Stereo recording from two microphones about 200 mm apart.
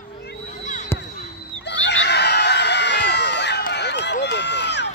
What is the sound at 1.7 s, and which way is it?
Screaming, 60° left (ahead or behind).